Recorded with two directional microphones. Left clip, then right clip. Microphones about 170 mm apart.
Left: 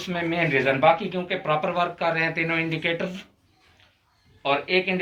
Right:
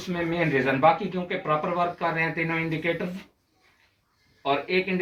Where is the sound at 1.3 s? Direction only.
50° left (ahead or behind).